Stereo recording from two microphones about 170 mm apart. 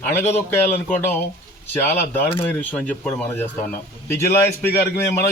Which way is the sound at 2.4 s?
10° left (ahead or behind).